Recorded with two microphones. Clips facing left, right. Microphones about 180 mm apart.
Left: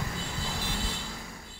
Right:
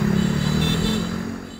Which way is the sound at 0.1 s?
70° right (ahead or behind).